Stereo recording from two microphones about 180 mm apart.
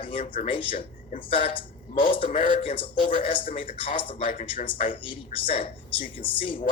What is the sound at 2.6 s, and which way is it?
Speech, 30° left (ahead or behind).